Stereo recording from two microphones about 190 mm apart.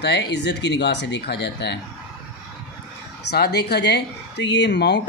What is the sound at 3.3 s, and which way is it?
A man's voice, 60° left (ahead or behind).